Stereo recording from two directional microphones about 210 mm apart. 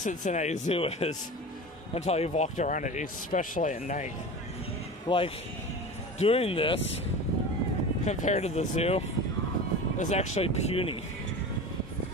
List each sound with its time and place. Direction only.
0.0 s speech: 40° left (ahead or behind)
5.0 s speech: 25° left (ahead or behind)
8.0 s speech: 35° left (ahead or behind)